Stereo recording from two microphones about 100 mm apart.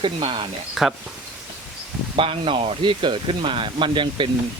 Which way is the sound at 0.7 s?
Centre (ahead or behind).